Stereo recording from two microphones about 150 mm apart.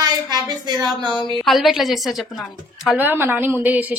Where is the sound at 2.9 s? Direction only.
15° right (ahead or behind).